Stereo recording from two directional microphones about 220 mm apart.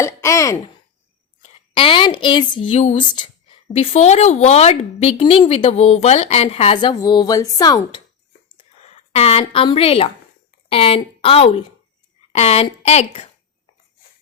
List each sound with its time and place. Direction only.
0.0 s speech: 15° left (ahead or behind)
1.7 s speech: 25° left (ahead or behind)
7.0 s speech: 15° left (ahead or behind)
8.5 s a sound: 30° left (ahead or behind)
10.7 s speech: 25° left (ahead or behind)